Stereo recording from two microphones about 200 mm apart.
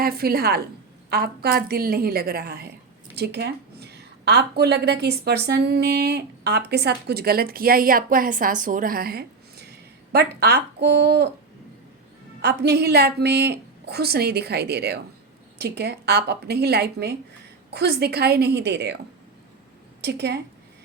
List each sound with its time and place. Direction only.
0.0 s a woman's voice: 50° right (ahead or behind)
12.4 s a woman's voice: 55° right (ahead or behind)
20.0 s speech: 55° right (ahead or behind)